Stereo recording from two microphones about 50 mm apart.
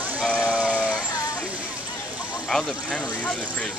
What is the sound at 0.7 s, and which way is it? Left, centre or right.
Vehicle, left.